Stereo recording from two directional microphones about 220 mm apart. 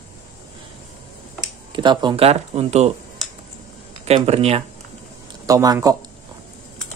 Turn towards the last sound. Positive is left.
turn(degrees=-15)  # may be behind; listen again after turning